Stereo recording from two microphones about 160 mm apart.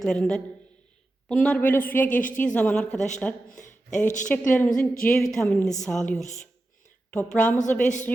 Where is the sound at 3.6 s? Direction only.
50° left (ahead or behind).